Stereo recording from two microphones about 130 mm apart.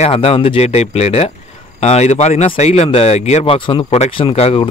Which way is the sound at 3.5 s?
40° left (ahead or behind).